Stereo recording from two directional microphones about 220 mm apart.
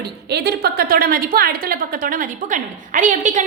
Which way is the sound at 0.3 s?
50° right (ahead or behind).